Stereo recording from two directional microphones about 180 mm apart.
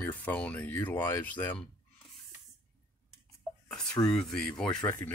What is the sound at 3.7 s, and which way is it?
Speech, 5° left (ahead or behind).